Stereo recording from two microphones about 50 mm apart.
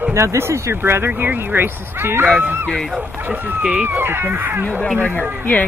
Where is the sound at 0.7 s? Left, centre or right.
Right.